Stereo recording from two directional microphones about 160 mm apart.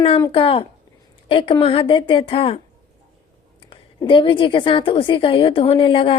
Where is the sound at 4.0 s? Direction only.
30° left (ahead or behind).